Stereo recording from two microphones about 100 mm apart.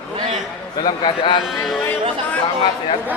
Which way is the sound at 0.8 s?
60° left (ahead or behind).